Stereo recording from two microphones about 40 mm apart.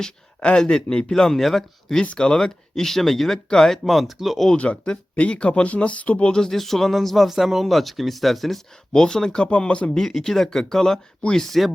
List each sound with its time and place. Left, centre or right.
0.3 s speech: left
0.6 s speech: centre
2.1 s speech: centre
3.8 s speech: centre
4.5 s speech: left
6.3 s speech: centre
7.3 s speech: centre
8.9 s speech: centre
9.5 s speech: left
9.9 s speech: centre